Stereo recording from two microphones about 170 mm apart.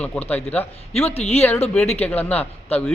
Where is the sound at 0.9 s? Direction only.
40° left (ahead or behind).